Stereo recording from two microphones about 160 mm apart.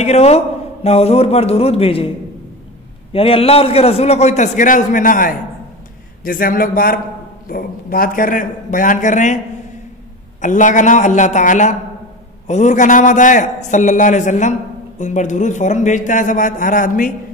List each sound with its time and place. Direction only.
0.0 s a man's voice: 40° left (ahead or behind)
3.1 s a man's voice: 35° left (ahead or behind)
4.6 s a man's voice: 55° left (ahead or behind)
10.4 s a man's voice: 50° left (ahead or behind)